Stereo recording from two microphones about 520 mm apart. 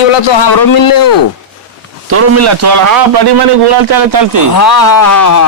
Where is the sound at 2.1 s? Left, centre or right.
Right.